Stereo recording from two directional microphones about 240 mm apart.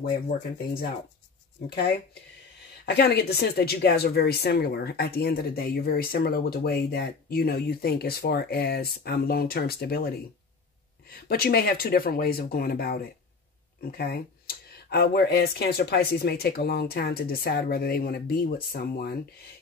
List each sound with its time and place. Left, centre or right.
2.8 s speech: left